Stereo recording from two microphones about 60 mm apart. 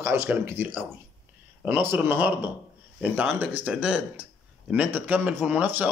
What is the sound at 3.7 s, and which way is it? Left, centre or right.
Speech, centre.